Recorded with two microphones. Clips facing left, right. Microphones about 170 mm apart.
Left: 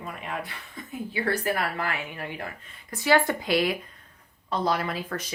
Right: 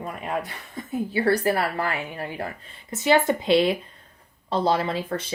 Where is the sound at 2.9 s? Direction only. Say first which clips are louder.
Right 3 dB; 20° right (ahead or behind).